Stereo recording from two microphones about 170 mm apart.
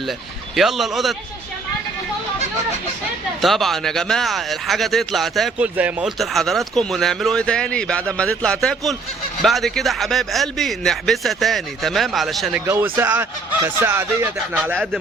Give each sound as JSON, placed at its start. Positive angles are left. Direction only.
{"t": 0.5, "sound": "speech", "side_deg": 0}
{"t": 3.4, "sound": "speech", "side_deg": 0}
{"t": 12.6, "sound": "speech", "side_deg": -15}